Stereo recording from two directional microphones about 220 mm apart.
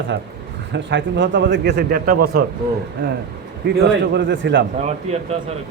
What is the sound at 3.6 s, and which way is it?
A man's voice, 50° right (ahead or behind).